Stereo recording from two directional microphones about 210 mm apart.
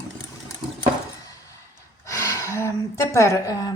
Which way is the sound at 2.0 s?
15° left (ahead or behind).